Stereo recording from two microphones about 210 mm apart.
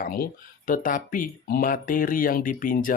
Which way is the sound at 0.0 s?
45° left (ahead or behind).